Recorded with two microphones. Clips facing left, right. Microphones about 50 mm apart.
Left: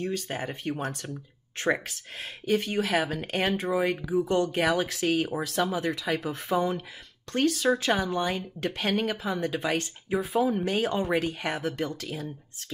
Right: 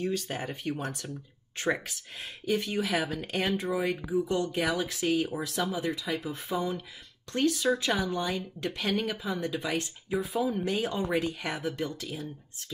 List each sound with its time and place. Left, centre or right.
0.3 s speech: left
0.7 s speech: left